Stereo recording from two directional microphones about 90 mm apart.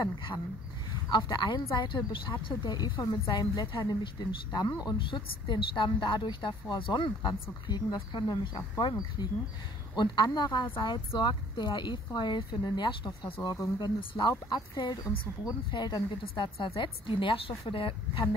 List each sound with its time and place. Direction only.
1.1 s a woman's voice: 60° left (ahead or behind)
16.5 s a woman's voice: 70° left (ahead or behind)